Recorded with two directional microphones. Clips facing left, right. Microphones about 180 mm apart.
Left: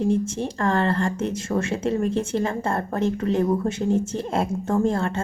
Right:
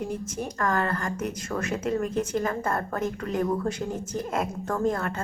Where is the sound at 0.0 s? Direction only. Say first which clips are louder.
Left 8 dB; 25° left (ahead or behind).